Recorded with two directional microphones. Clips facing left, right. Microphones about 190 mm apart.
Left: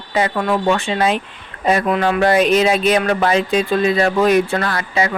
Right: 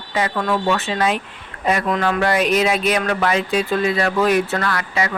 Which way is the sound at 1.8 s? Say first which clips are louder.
Left 3 dB; 15° left (ahead or behind).